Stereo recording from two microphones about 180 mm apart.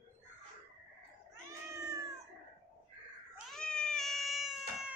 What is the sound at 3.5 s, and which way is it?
Cat, 5° left (ahead or behind).